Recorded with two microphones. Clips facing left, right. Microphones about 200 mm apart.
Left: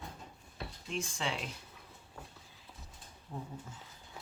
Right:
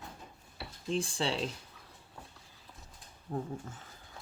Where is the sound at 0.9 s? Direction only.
30° right (ahead or behind).